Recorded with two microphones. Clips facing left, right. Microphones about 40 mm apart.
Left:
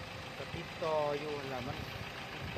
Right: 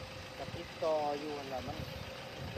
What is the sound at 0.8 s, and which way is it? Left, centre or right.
Speech, left.